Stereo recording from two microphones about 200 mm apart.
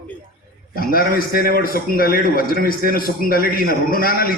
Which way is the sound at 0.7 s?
45° left (ahead or behind).